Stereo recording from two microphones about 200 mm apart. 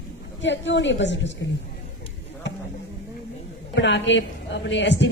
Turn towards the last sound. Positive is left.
turn(degrees=60)  # may be behind; listen again after turning